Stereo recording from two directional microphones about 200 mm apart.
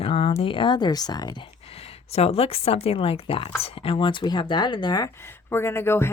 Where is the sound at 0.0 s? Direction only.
30° left (ahead or behind).